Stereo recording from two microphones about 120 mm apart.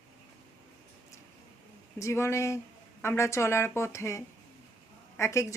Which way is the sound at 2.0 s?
20° left (ahead or behind).